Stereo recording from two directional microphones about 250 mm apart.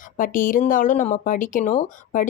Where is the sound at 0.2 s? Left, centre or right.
Left.